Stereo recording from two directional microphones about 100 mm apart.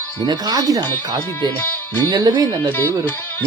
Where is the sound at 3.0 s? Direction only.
25° left (ahead or behind).